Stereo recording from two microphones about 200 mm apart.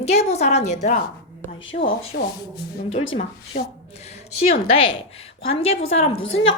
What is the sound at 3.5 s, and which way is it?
Speech, 50° left (ahead or behind).